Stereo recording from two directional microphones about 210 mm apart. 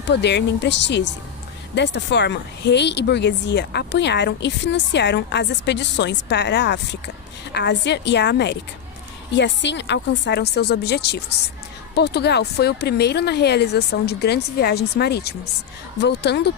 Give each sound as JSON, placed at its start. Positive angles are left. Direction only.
{"t": 0.1, "sound": "a woman's voice", "side_deg": 55}